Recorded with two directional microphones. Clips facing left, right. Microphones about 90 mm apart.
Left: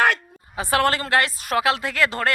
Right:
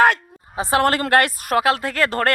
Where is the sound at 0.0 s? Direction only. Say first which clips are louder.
Right 4 dB; 35° right (ahead or behind).